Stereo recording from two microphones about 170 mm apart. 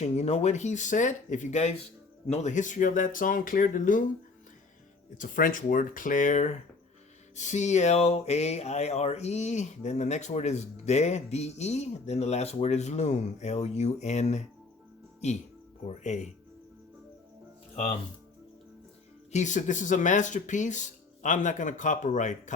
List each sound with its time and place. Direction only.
0.0 s speech: 40° left (ahead or behind)
5.1 s speech: 50° left (ahead or behind)
15.8 s speech: 40° left (ahead or behind)
19.3 s speech: 45° left (ahead or behind)